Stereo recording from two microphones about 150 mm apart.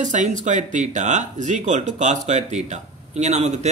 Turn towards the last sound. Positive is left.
turn(degrees=-50)  # may be behind; listen again after turning